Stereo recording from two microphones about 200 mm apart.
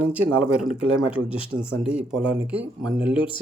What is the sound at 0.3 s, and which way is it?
Speech, 90° right.